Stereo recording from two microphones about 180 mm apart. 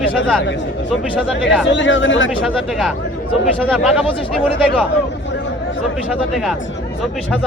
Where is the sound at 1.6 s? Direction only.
90° left.